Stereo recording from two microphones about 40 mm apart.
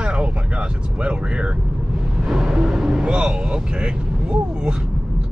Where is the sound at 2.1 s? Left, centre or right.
Centre.